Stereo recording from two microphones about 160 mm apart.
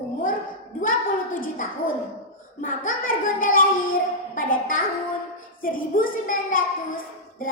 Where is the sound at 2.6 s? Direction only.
60° left (ahead or behind).